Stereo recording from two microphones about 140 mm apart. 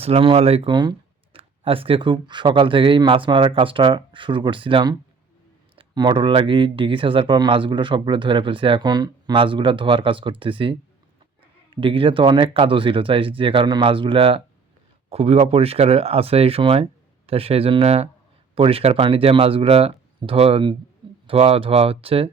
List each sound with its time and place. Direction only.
0.0 s speech: 40° right (ahead or behind)